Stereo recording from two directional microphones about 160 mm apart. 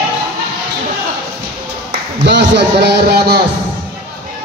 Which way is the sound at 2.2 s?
90° right.